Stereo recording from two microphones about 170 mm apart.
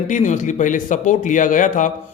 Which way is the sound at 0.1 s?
45° left (ahead or behind).